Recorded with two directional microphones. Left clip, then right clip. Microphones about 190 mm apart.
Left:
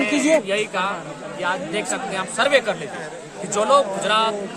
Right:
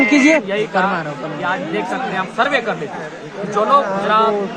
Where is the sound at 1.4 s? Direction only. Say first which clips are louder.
Right 3 dB; 55° left (ahead or behind).